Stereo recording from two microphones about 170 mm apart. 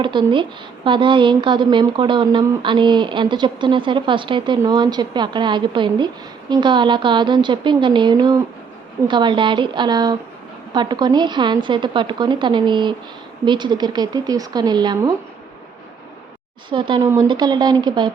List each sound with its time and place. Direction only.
0.0 s a woman's voice: 30° right (ahead or behind)
16.6 s a woman's voice: 30° right (ahead or behind)
17.0 s a woman's voice: 15° right (ahead or behind)